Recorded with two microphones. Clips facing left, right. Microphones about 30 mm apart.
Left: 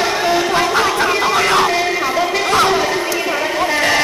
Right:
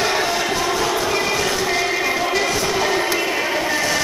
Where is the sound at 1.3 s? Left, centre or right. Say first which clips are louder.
Left 7 dB; left.